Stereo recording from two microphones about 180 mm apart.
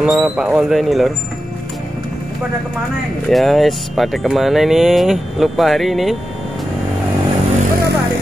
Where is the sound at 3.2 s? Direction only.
Centre (ahead or behind).